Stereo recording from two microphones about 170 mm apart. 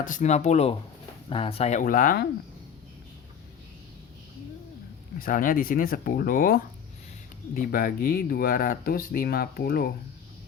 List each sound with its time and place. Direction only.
0.0 s speech: 50° left (ahead or behind)
5.2 s speech: 55° left (ahead or behind)